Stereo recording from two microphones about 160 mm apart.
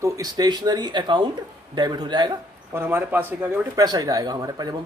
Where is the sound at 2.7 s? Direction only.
15° right (ahead or behind).